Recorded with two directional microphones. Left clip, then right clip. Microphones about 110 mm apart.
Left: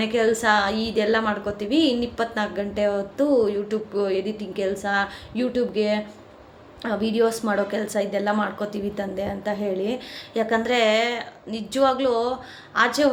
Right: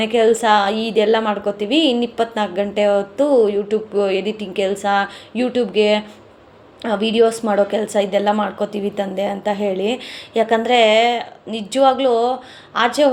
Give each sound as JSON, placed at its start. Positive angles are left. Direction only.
{"t": 0.0, "sound": "a woman's voice", "side_deg": -35}